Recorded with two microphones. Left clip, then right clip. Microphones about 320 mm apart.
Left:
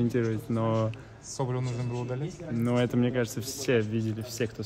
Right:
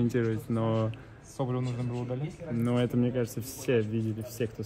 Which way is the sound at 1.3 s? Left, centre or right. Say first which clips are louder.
Left 1 dB; left.